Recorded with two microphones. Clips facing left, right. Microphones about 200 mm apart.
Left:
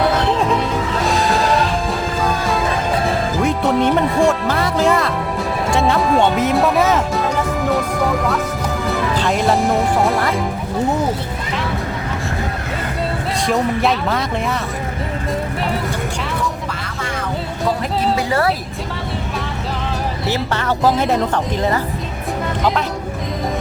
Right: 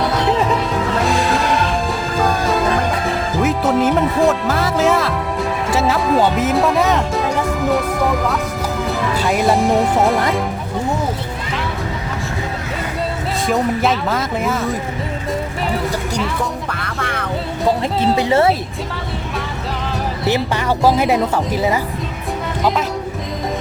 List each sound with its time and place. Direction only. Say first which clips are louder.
3.4 s speech: right 1 dB; centre (ahead or behind)
8.9 s music: left 1 dB; 5° right (ahead or behind)
9.6 s speech: right 2 dB; centre (ahead or behind)
13.5 s speech: even; centre (ahead or behind)
16.8 s music: right 1 dB; 60° right (ahead or behind)
18.2 s speech: right 6 dB; 25° right (ahead or behind)
20.2 s a woman's voice: right 3 dB; 15° right (ahead or behind)